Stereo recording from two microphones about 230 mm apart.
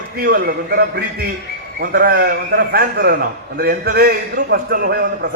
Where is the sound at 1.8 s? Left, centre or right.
Right.